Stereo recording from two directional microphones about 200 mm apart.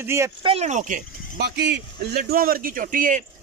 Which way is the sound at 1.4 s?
55° right (ahead or behind).